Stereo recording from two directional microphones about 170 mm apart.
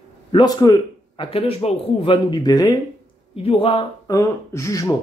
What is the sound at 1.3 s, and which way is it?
Speech, 35° left (ahead or behind).